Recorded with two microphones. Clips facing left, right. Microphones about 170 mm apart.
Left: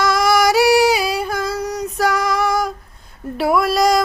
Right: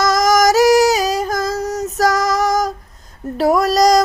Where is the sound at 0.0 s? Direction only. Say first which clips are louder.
Right 2 dB; 40° right (ahead or behind).